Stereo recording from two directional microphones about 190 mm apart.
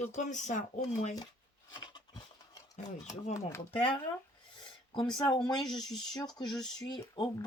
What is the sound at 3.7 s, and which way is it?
Speech, 30° left (ahead or behind).